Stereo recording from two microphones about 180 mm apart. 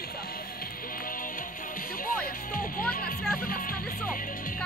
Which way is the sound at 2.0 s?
50° left (ahead or behind).